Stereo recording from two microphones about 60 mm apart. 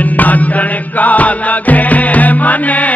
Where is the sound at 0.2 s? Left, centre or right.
Left.